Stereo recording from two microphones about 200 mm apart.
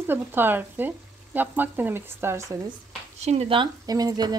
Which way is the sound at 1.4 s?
10° right (ahead or behind).